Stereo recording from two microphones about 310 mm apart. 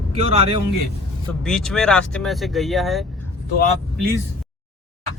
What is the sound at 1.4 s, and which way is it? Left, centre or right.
Speech, centre.